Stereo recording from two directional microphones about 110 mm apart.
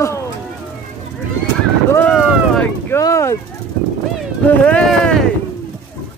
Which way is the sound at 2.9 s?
25° left (ahead or behind).